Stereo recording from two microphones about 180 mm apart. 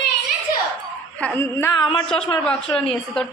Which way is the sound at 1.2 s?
10° left (ahead or behind).